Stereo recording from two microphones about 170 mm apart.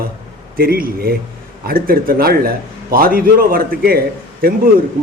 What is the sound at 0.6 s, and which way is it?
A man's voice, 60° right (ahead or behind).